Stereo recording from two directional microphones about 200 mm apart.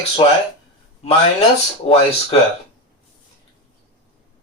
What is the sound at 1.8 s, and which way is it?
Speech, 30° left (ahead or behind).